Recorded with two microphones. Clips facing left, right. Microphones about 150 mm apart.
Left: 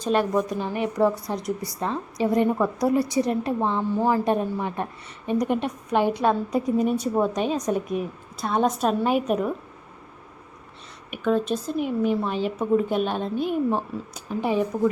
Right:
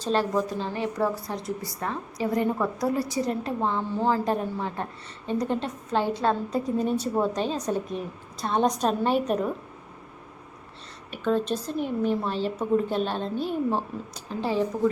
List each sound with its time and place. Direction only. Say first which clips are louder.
0.0 s a woman's voice: left 2 dB; 15° left (ahead or behind)
11.3 s a woman's voice: left 2 dB; 10° left (ahead or behind)